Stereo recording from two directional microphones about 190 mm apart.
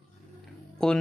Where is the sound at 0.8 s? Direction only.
5° left (ahead or behind).